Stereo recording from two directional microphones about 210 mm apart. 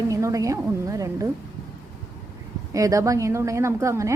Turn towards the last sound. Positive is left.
turn(degrees=-15)  # may be behind; listen again after turning